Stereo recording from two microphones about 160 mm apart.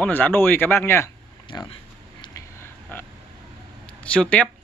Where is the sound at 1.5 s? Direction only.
30° left (ahead or behind).